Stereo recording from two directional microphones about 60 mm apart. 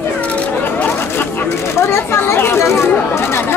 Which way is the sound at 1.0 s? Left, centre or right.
Left.